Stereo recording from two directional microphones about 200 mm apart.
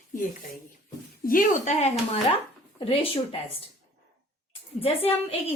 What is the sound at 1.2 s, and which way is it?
A woman's voice, 45° left (ahead or behind).